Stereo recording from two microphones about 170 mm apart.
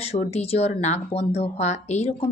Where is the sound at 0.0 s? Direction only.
35° left (ahead or behind).